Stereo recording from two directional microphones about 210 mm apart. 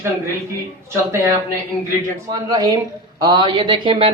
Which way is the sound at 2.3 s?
20° right (ahead or behind).